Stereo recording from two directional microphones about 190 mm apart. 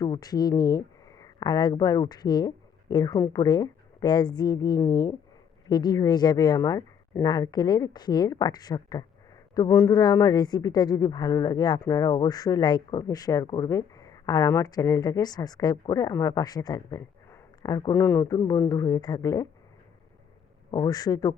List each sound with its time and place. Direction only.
0.0 s speech: 20° left (ahead or behind)
20.7 s speech: 20° left (ahead or behind)